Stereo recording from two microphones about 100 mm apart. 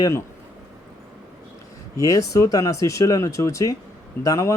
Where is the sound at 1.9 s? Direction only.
35° left (ahead or behind).